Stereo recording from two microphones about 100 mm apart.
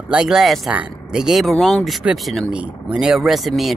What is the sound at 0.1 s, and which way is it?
Speech, 10° right (ahead or behind).